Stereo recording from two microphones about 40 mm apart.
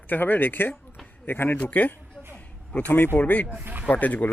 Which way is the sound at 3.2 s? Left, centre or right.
Left.